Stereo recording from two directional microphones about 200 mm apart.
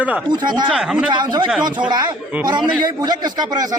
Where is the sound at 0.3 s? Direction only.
20° right (ahead or behind).